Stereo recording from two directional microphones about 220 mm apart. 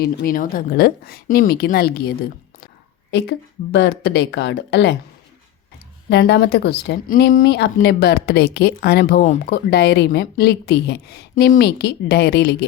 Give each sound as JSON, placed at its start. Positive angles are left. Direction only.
{"t": 0.0, "sound": "speech", "side_deg": 45}
{"t": 6.1, "sound": "speech", "side_deg": 50}